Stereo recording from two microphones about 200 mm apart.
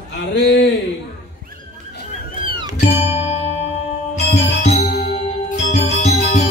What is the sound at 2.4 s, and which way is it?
Music, 25° right (ahead or behind).